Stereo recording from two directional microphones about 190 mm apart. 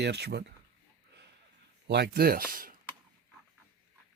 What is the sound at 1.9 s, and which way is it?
Speech, 60° right (ahead or behind).